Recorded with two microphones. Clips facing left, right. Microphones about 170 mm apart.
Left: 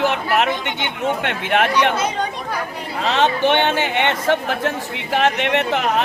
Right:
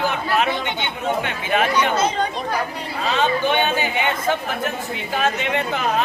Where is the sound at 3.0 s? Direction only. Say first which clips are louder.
Left 3 dB; 75° left (ahead or behind).